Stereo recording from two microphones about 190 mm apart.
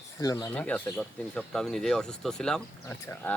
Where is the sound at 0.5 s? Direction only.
5° left (ahead or behind).